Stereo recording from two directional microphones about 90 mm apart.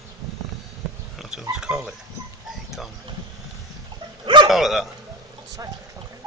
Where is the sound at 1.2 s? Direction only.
5° right (ahead or behind).